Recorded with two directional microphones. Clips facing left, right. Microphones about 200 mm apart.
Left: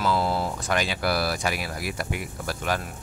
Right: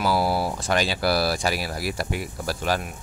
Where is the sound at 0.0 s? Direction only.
10° right (ahead or behind).